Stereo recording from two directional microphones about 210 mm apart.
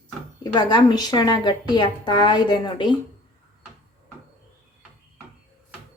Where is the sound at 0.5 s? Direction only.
20° left (ahead or behind).